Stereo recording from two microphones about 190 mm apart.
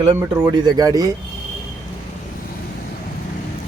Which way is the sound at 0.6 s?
20° right (ahead or behind).